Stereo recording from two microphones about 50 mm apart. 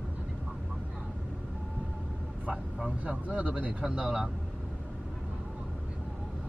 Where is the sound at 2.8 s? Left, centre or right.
Right.